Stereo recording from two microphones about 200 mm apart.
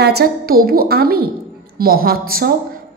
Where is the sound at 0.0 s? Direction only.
50° right (ahead or behind).